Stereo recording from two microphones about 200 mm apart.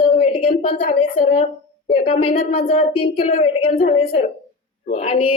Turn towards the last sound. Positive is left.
turn(degrees=30)  # may be behind; listen again after turning